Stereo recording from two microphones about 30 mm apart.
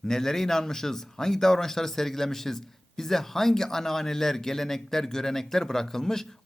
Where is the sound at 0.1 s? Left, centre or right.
Centre.